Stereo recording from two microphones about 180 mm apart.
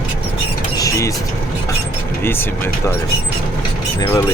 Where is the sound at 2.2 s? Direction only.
10° left (ahead or behind).